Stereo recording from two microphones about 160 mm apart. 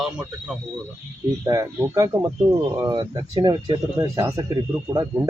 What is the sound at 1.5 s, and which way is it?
Speech, 20° right (ahead or behind).